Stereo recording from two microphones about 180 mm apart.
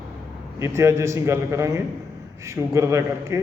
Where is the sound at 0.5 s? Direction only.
15° right (ahead or behind).